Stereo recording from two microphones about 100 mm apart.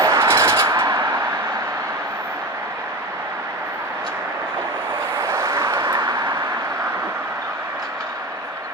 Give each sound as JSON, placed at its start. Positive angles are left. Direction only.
{"t": 0.0, "sound": "vehicle", "side_deg": -25}
{"t": 5.2, "sound": "vehicle", "side_deg": -30}